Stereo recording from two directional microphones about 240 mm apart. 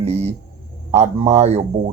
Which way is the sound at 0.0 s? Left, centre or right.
Right.